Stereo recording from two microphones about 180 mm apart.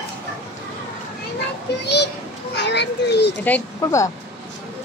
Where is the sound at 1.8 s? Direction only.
70° left (ahead or behind).